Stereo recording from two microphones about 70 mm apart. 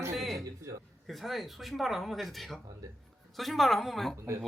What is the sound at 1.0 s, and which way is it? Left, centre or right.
Speech, centre.